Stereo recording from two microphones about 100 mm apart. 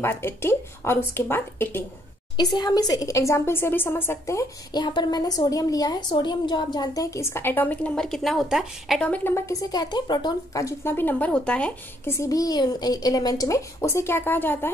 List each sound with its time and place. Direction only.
0.0 s a woman's voice: 25° left (ahead or behind)
2.5 s a woman's voice: 40° left (ahead or behind); by 4.5 s 25° left (ahead or behind)
4.7 s a woman's voice: 45° left (ahead or behind); by 9.0 s 5° right (ahead or behind)
9.0 s a woman's voice: 15° left (ahead or behind)
9.3 s a woman's voice: 35° left (ahead or behind); by 11.7 s 10° left (ahead or behind)
12.0 s a woman's voice: 30° left (ahead or behind)